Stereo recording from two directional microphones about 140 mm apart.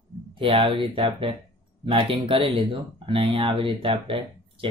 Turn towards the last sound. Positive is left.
turn(degrees=-40)  # may be behind; listen again after turning